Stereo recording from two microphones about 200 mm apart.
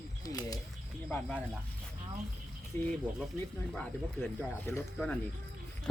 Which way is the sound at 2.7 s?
10° left (ahead or behind).